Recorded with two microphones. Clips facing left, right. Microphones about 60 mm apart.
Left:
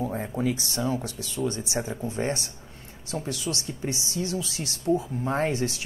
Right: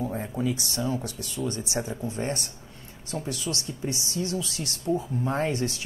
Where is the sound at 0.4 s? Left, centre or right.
Left.